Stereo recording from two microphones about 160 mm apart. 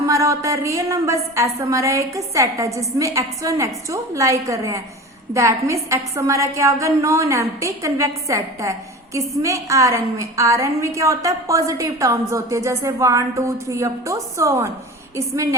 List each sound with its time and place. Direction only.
0.0 s a woman's voice: 20° right (ahead or behind)